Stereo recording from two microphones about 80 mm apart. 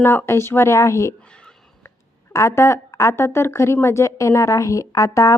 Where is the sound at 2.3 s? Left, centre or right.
Left.